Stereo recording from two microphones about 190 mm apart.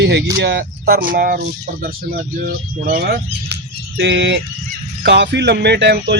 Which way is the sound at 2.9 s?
55° right (ahead or behind).